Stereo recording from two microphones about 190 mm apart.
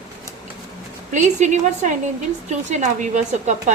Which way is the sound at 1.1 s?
40° right (ahead or behind).